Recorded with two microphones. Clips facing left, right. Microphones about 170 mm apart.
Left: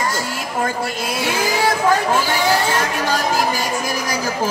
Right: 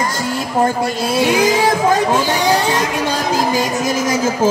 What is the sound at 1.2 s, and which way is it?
A man's voice, 20° right (ahead or behind).